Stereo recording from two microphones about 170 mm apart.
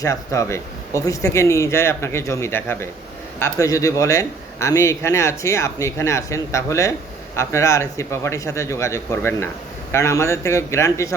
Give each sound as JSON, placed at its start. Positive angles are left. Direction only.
{"t": 0.0, "sound": "speech", "side_deg": 20}